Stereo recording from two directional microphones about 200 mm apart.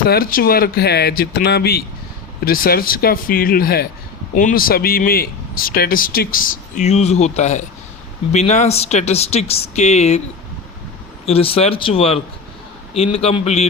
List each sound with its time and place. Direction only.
0.1 s speech: 45° left (ahead or behind)
11.3 s speech: 30° left (ahead or behind)